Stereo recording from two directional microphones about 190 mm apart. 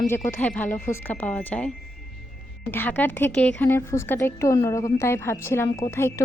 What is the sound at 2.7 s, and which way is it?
Speech, 10° left (ahead or behind).